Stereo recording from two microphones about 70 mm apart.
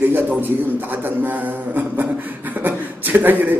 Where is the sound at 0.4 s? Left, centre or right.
Right.